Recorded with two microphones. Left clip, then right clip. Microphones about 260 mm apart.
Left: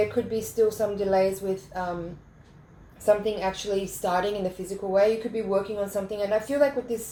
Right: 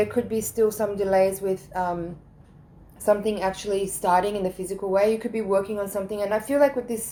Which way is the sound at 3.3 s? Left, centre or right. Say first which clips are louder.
Right 2 dB; right.